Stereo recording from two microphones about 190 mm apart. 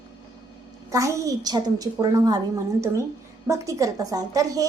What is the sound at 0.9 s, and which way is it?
A woman's voice, 15° right (ahead or behind).